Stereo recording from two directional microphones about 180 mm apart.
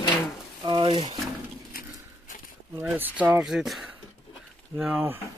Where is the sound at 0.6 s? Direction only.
25° right (ahead or behind).